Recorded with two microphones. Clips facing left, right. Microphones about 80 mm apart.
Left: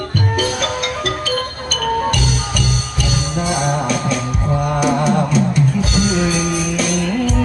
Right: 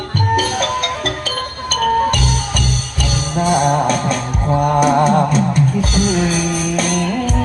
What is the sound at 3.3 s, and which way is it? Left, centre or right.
Music, right.